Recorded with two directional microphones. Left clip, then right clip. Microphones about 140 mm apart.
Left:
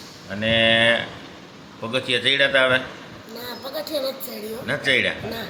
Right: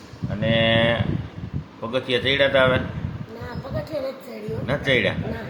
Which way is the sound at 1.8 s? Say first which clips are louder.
Left 1 dB; 15° right (ahead or behind).